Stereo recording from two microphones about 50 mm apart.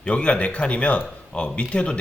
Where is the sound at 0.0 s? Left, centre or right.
Left.